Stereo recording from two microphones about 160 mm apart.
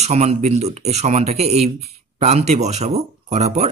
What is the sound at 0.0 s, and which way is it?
Speech, 45° right (ahead or behind).